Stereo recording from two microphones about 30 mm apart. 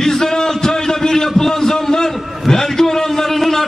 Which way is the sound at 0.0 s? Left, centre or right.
Centre.